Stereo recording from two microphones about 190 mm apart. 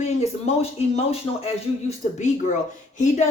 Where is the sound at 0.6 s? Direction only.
30° left (ahead or behind).